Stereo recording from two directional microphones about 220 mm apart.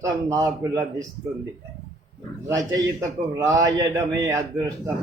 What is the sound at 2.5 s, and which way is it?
A man's voice, 15° right (ahead or behind).